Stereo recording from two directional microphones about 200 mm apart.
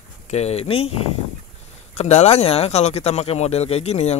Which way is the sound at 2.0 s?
35° left (ahead or behind).